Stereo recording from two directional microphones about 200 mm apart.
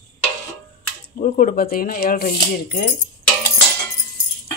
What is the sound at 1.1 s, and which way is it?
Speech, 45° left (ahead or behind).